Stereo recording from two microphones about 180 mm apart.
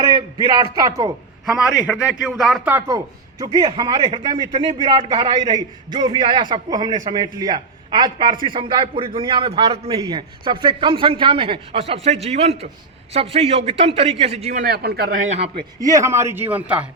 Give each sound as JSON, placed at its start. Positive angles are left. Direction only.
{"t": 0.0, "sound": "a sound", "side_deg": -20}
{"t": 0.4, "sound": "a man's voice", "side_deg": -20}
{"t": 1.5, "sound": "a man's voice", "side_deg": 0}
{"t": 2.6, "sound": "a man's voice", "side_deg": -15}
{"t": 9.9, "sound": "a man's voice", "side_deg": -20}
{"t": 15.3, "sound": "a man's voice", "side_deg": -35}
{"t": 15.8, "sound": "speech", "side_deg": -20}